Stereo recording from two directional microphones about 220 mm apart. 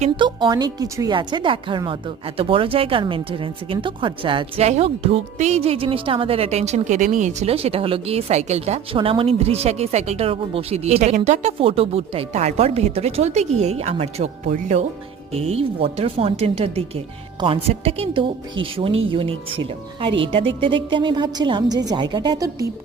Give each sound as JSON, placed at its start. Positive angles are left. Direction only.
{"t": 0.0, "sound": "speech", "side_deg": -20}